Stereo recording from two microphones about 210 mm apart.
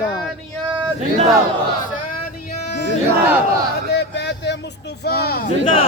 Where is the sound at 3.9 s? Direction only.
55° left (ahead or behind).